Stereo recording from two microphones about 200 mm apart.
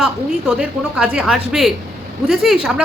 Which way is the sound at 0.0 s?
5° right (ahead or behind).